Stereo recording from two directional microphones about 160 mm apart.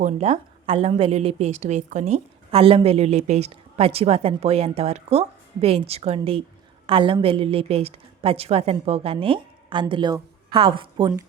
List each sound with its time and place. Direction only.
0.0 s a woman's voice: 45° right (ahead or behind)